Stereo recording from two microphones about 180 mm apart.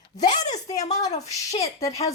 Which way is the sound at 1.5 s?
35° left (ahead or behind).